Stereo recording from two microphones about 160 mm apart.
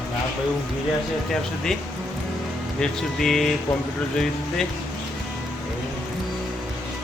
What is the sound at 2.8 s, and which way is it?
Speech, 5° left (ahead or behind).